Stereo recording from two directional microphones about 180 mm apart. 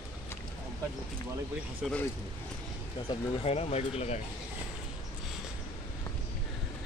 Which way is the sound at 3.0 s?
30° left (ahead or behind).